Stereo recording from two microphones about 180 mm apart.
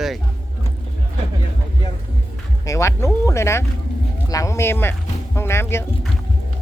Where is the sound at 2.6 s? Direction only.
15° left (ahead or behind).